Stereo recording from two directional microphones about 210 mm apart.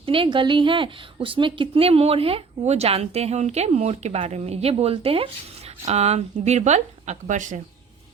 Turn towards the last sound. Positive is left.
turn(degrees=-35)  # may be behind; listen again after turning